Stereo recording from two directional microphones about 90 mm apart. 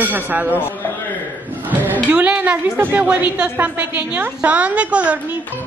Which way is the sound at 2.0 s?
15° right (ahead or behind).